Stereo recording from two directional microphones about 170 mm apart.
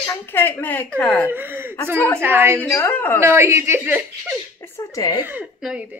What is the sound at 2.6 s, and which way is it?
Speech, 10° left (ahead or behind).